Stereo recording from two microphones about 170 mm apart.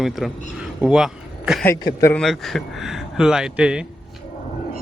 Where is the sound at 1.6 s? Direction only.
20° left (ahead or behind).